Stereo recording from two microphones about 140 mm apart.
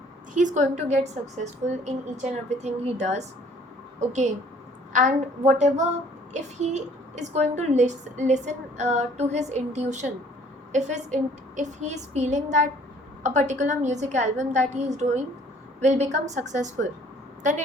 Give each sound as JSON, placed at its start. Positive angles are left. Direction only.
{"t": 0.3, "sound": "a woman's voice", "side_deg": -60}
{"t": 4.9, "sound": "a woman's voice", "side_deg": -60}